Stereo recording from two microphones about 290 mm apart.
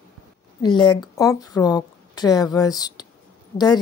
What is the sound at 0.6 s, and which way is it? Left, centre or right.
A woman's voice, centre.